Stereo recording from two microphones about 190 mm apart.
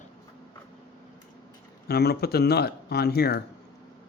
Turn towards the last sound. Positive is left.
turn(degrees=55)  # may be behind; listen again after turning